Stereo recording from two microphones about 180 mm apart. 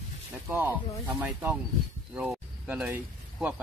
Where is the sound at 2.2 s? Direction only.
5° right (ahead or behind).